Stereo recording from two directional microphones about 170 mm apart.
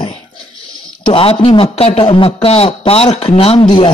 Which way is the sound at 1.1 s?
35° left (ahead or behind).